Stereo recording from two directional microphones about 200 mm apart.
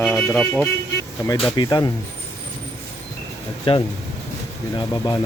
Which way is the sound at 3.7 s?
25° left (ahead or behind).